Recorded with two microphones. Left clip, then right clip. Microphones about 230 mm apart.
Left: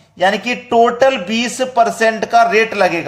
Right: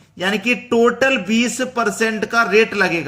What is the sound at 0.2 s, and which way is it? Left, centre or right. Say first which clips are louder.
A man's voice: left 4 dB; centre.